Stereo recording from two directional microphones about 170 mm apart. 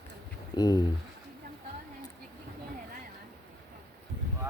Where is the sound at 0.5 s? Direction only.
25° left (ahead or behind).